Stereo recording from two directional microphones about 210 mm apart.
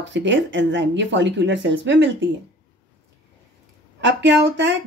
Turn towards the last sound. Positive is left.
turn(degrees=-60)  # may be behind; listen again after turning